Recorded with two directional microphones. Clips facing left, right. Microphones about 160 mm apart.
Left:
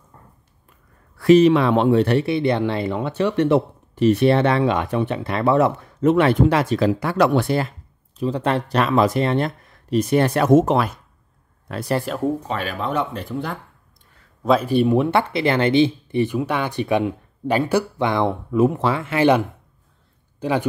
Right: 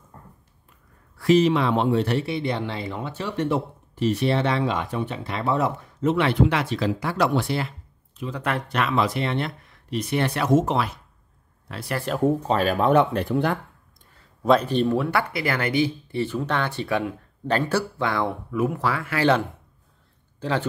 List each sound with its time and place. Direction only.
1.1 s speech: 60° left (ahead or behind)
8.2 s speech: 30° left (ahead or behind); by 11.8 s 50° left (ahead or behind)
12.1 s speech: centre (ahead or behind)
12.4 s speech: 40° right (ahead or behind)
12.7 s speech: 55° right (ahead or behind)
14.4 s a man's voice: 5° left (ahead or behind)